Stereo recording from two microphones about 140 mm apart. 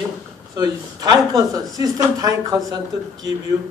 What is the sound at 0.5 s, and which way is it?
A man's voice, 30° right (ahead or behind).